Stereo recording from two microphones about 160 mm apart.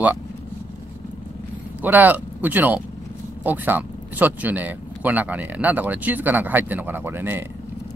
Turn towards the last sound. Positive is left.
turn(degrees=-15)  # may be behind; listen again after turning